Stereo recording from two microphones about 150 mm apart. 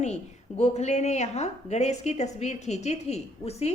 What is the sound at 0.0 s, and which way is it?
A woman's voice, 50° left (ahead or behind).